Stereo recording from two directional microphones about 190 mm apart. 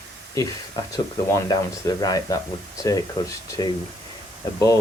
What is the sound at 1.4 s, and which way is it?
Speech, 20° left (ahead or behind).